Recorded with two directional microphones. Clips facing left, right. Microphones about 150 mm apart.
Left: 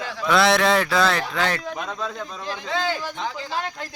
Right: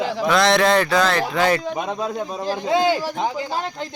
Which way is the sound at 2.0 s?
40° right (ahead or behind).